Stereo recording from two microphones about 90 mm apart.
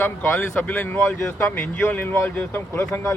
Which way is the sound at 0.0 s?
20° left (ahead or behind).